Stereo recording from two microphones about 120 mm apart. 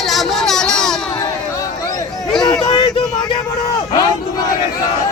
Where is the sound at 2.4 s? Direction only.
35° left (ahead or behind).